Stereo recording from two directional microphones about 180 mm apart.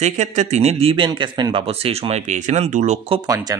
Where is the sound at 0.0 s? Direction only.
40° right (ahead or behind).